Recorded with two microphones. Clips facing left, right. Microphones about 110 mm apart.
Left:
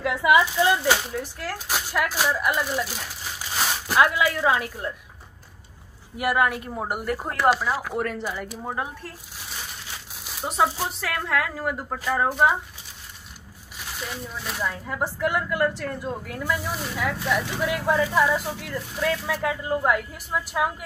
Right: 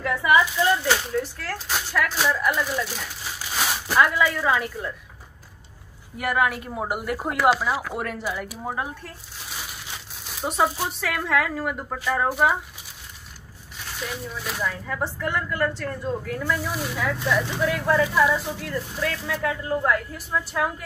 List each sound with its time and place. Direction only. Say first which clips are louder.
0.0 s speech: left 1 dB; 15° left (ahead or behind)
6.1 s speech: left 1 dB; 5° left (ahead or behind)
10.2 s speech: even; centre (ahead or behind)
14.0 s speech: right 2 dB; centre (ahead or behind)